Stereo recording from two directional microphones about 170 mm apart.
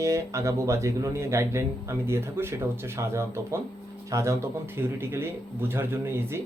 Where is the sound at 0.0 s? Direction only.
15° right (ahead or behind).